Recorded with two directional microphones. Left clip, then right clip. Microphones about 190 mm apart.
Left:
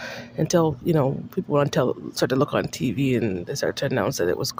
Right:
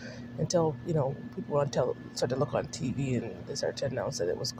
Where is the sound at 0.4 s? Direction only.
45° left (ahead or behind).